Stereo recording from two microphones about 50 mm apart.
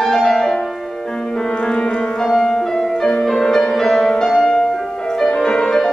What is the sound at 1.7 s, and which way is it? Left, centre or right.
Music, centre.